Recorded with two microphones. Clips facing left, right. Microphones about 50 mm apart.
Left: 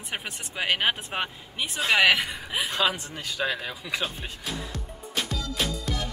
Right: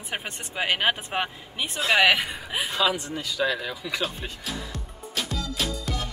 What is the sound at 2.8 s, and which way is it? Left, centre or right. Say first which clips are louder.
Speech: right 2 dB; left.